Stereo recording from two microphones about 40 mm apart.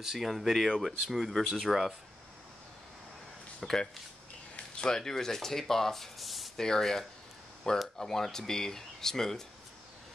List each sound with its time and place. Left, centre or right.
0.0 s speech: centre
3.6 s speech: centre
5.0 s speech: centre
6.5 s speech: centre